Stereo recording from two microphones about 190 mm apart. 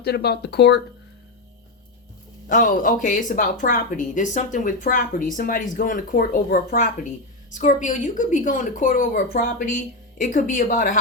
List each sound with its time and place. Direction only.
0.0 s speech: 60° left (ahead or behind)
2.5 s speech: 45° left (ahead or behind)
7.5 s speech: 40° left (ahead or behind)